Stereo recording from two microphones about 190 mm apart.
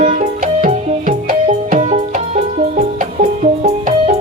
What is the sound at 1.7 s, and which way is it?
Music, 35° right (ahead or behind).